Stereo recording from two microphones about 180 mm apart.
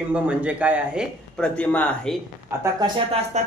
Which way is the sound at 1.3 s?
5° left (ahead or behind).